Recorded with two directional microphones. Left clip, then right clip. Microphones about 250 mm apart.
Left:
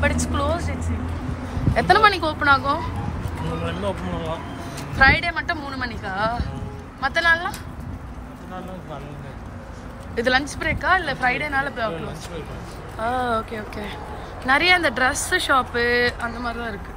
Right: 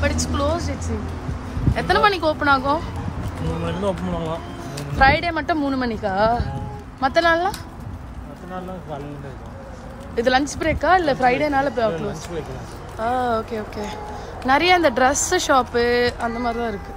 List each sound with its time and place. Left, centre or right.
0.0 s speech: centre
3.6 s speech: right
4.9 s speech: centre
10.1 s speech: centre
13.0 s speech: centre